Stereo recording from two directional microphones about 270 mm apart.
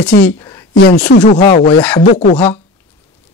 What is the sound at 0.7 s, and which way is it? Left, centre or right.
Speech, left.